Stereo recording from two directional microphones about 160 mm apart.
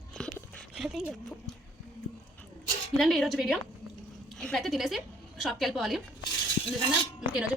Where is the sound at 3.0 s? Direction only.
Centre (ahead or behind).